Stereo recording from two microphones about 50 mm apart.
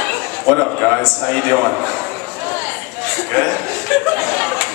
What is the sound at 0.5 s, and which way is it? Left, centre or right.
A man's voice, centre.